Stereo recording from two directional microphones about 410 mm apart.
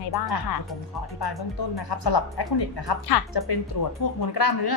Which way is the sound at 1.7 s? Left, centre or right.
Left.